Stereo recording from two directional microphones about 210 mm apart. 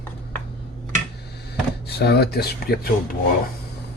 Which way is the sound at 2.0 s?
50° left (ahead or behind).